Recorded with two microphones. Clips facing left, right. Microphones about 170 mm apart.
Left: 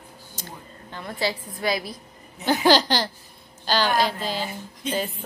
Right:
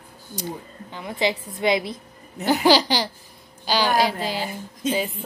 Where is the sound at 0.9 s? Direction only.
15° right (ahead or behind).